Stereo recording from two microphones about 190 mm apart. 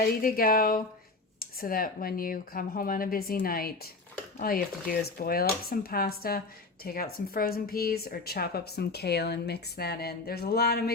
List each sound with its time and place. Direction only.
0.0 s a woman's voice: 50° left (ahead or behind)